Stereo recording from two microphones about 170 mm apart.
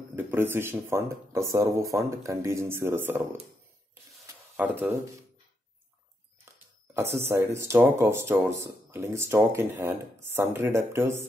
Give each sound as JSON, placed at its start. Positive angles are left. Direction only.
{"t": 0.1, "sound": "speech", "side_deg": -10}
{"t": 4.6, "sound": "speech", "side_deg": -10}
{"t": 6.4, "sound": "a sound", "side_deg": -15}
{"t": 7.2, "sound": "speech", "side_deg": -15}